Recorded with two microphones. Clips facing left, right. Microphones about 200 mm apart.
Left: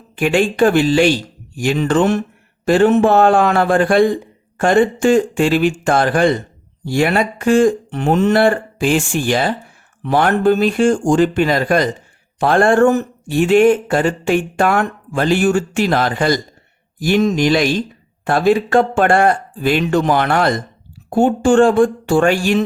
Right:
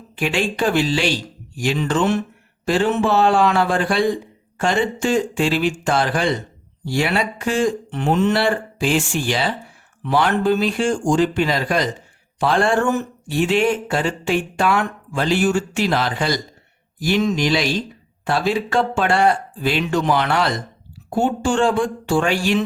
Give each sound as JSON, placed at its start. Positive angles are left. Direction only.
{"t": 0.2, "sound": "speech", "side_deg": 50}